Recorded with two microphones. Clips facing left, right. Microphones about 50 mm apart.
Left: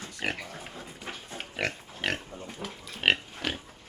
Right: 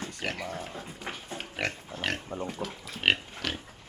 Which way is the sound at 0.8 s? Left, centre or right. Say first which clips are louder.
Right 2 dB; centre.